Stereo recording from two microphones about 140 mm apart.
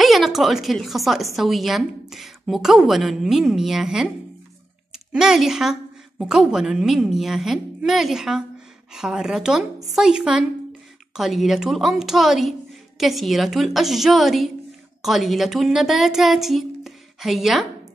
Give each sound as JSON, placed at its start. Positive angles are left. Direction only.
{"t": 0.0, "sound": "a woman's voice", "side_deg": 0}